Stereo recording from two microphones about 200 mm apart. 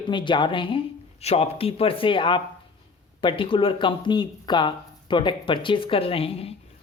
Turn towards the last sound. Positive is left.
turn(degrees=30)  # may be behind; listen again after turning